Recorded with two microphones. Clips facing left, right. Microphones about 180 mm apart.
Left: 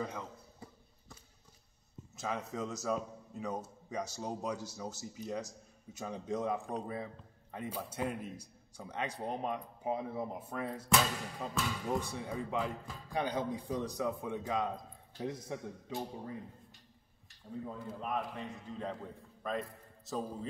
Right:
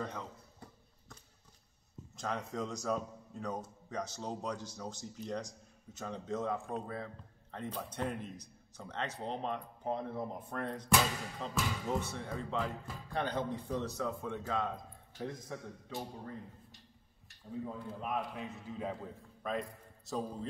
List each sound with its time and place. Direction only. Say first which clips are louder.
0.0 s a sound: left 1 dB; 5° left (ahead or behind)
2.1 s speech: even; 5° left (ahead or behind)
11.5 s a man's voice: even; 5° right (ahead or behind)
12.0 s speech: left 1 dB; 10° left (ahead or behind)
17.5 s a man's voice: right 1 dB; centre (ahead or behind)